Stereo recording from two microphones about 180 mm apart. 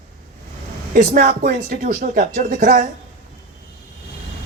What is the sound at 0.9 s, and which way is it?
Speech, 50° right (ahead or behind).